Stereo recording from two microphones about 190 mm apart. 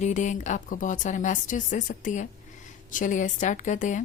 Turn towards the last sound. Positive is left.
turn(degrees=40)  # may be behind; listen again after turning